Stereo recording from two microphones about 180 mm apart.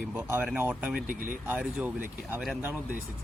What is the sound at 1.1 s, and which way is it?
Speech, 50° right (ahead or behind).